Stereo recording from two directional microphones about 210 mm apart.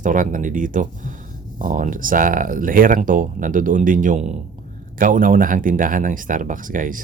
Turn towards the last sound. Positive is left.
turn(degrees=-40)  # may be behind; listen again after turning